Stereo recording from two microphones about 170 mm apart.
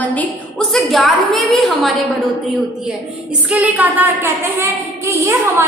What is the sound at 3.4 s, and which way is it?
A woman's voice, 10° right (ahead or behind).